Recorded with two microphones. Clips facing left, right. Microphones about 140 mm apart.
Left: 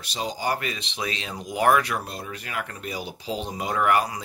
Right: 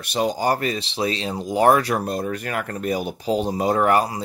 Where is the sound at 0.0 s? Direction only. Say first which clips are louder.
Right 7 dB; 55° right (ahead or behind).